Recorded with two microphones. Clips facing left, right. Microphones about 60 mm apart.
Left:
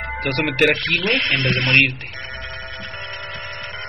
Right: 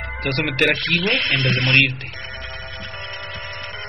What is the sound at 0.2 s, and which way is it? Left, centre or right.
Speech, centre.